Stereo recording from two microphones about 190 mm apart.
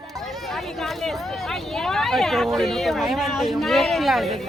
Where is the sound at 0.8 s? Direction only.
Centre (ahead or behind).